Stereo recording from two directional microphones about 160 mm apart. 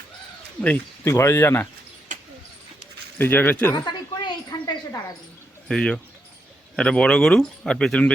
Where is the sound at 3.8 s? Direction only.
25° left (ahead or behind).